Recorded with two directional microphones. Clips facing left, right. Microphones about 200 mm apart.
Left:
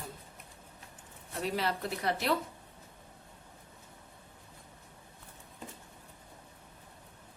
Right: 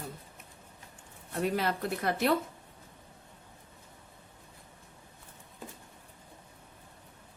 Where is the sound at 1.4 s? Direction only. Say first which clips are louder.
Right 3 dB; 50° right (ahead or behind).